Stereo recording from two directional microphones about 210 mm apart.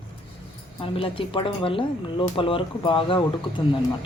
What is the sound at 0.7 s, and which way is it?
Speech, 25° left (ahead or behind).